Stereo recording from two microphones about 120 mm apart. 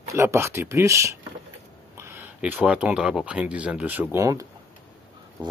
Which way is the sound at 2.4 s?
10° right (ahead or behind).